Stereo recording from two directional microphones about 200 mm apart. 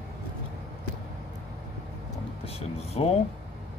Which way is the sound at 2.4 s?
30° left (ahead or behind).